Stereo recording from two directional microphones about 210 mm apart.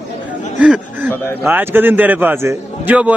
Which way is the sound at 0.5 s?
5° right (ahead or behind).